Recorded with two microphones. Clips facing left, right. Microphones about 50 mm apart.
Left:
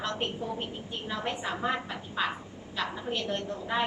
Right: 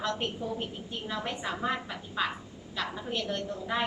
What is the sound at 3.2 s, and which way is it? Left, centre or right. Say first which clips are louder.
Speech: even; left.